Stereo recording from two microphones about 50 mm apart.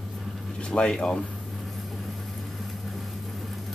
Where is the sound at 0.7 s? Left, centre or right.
Centre.